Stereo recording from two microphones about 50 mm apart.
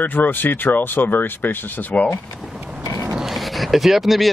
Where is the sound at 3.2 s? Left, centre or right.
Centre.